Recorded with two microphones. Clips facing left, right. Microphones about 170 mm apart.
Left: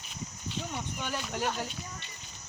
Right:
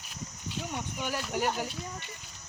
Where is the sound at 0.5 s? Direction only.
10° right (ahead or behind).